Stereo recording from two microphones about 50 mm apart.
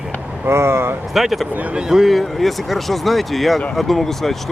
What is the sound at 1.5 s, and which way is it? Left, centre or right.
Speech, right.